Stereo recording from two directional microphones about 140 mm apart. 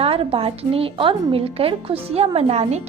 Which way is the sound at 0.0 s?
45° right (ahead or behind).